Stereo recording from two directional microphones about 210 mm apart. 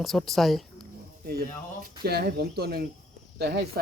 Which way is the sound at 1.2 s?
45° right (ahead or behind).